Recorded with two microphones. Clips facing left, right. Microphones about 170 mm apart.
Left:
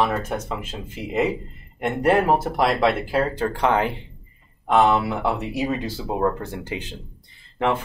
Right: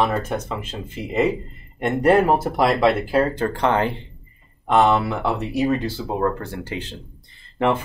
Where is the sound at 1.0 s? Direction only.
5° left (ahead or behind).